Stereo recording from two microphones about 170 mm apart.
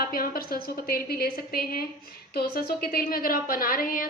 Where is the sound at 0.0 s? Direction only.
60° left (ahead or behind).